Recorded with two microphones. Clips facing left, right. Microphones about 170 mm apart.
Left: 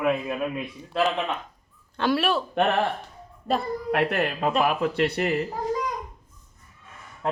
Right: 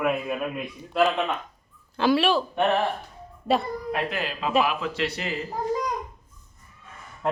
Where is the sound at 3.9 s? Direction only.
65° left (ahead or behind).